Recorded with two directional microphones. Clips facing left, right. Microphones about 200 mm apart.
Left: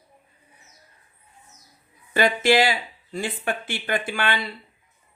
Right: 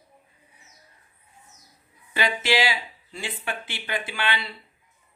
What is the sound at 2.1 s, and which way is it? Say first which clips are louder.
Speech: left 6 dB; 45° left (ahead or behind).